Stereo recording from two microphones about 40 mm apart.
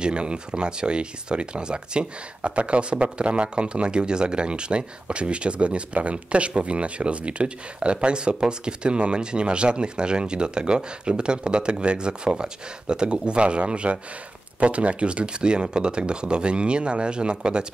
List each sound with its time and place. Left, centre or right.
0.0 s speech: right